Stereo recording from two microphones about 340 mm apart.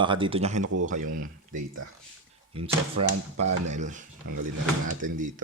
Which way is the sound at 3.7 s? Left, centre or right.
Right.